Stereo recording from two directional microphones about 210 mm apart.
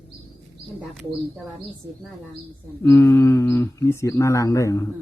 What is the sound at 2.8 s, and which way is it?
Speech, 10° left (ahead or behind).